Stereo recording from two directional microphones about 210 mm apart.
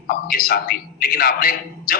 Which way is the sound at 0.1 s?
45° left (ahead or behind).